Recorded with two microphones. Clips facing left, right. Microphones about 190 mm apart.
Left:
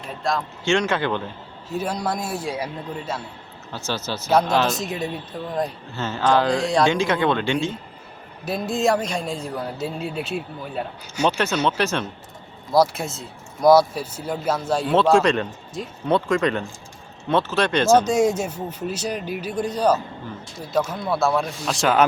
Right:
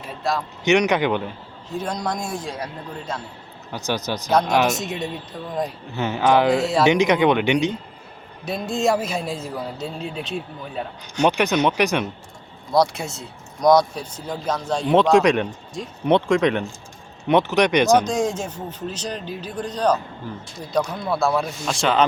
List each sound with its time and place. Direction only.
0.2 s speech: 5° right (ahead or behind)
0.6 s speech: 15° right (ahead or behind)
1.7 s a man's voice: 5° left (ahead or behind)
3.7 s speech: 15° right (ahead or behind)
4.7 s speech: centre (ahead or behind)
6.0 s speech: 15° right (ahead or behind)
6.6 s speech: centre (ahead or behind)
6.8 s speech: 20° right (ahead or behind)
8.4 s speech: centre (ahead or behind)
11.3 s speech: 15° right (ahead or behind)
12.7 s speech: centre (ahead or behind)
15.1 s speech: 15° right (ahead or behind)
18.0 s a man's voice: 10° left (ahead or behind)